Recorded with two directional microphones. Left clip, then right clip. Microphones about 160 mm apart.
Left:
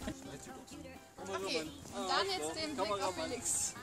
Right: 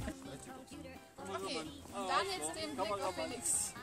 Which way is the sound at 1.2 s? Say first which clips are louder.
Left 3 dB; 30° right (ahead or behind).